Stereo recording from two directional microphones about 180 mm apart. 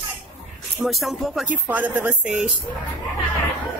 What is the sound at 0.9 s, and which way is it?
Speech, centre (ahead or behind).